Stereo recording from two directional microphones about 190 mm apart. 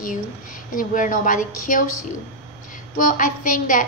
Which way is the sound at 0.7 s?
45° left (ahead or behind).